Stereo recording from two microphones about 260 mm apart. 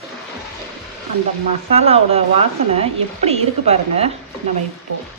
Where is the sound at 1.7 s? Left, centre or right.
Right.